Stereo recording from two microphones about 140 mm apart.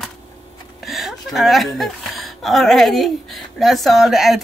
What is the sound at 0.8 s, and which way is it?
A woman's voice, centre (ahead or behind).